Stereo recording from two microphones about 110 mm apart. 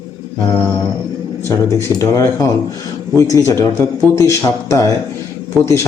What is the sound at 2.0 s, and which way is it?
Speech, 30° left (ahead or behind).